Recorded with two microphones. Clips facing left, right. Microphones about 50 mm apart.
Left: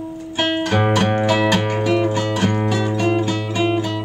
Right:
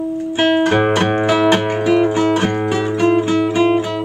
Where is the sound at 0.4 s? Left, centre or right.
Centre.